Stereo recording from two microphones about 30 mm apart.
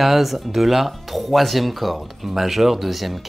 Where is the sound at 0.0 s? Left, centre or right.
Centre.